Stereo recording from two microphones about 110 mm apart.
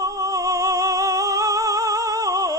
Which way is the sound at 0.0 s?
30° right (ahead or behind).